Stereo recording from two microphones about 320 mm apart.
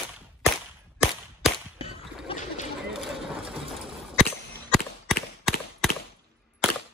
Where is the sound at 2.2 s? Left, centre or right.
Left.